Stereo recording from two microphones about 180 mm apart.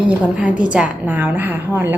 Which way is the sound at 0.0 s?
5° right (ahead or behind).